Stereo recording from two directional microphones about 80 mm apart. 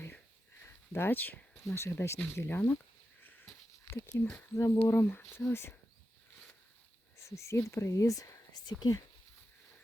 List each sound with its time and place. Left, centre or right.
0.6 s a sound: left
1.6 s speech: left
3.2 s sniff: left
3.8 s speech: left
4.9 s speech: left
7.2 s speech: left